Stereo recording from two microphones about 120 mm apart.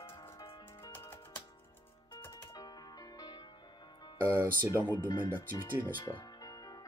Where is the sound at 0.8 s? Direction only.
20° left (ahead or behind).